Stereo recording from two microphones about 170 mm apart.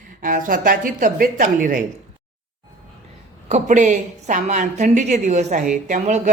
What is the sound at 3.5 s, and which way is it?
Speech, 45° right (ahead or behind).